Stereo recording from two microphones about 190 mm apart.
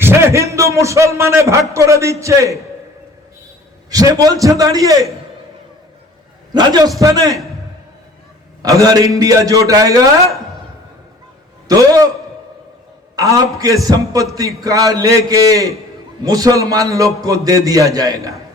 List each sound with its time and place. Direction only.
0.0 s a man's voice: 10° right (ahead or behind)
3.8 s a man's voice: 20° right (ahead or behind)
6.5 s a man's voice: 20° right (ahead or behind)
8.6 s a man's voice: 20° right (ahead or behind)
11.7 s a man's voice: 20° right (ahead or behind)
13.1 s a man's voice: 20° right (ahead or behind)